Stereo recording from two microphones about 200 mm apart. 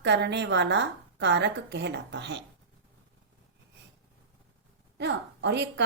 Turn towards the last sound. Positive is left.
turn(degrees=-60)  # may be behind; listen again after turning